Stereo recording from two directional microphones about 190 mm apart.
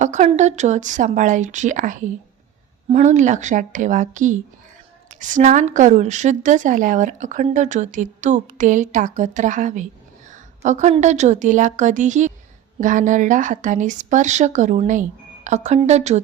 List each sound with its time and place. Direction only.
0.0 s a woman's voice: 40° right (ahead or behind)